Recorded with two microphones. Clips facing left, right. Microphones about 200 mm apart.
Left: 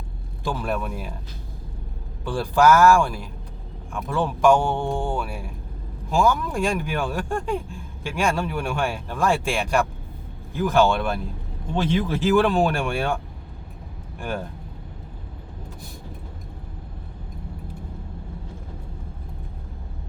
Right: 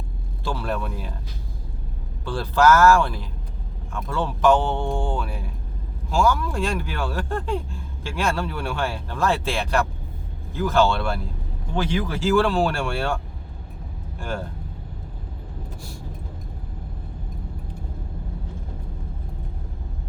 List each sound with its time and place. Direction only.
0.4 s speech: 15° left (ahead or behind)
2.2 s speech: 15° left (ahead or behind)
14.2 s speech: 15° left (ahead or behind)